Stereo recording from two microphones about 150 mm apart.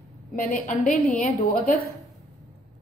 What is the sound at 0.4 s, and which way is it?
A woman's voice, 60° left (ahead or behind).